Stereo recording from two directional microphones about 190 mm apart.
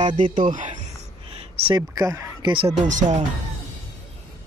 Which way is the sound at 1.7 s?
20° right (ahead or behind).